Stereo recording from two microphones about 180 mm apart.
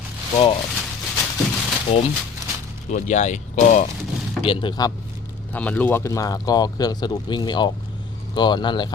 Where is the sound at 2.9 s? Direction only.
40° left (ahead or behind).